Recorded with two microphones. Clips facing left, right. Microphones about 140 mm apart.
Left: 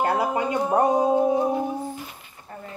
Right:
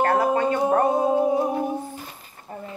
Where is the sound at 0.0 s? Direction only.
15° left (ahead or behind).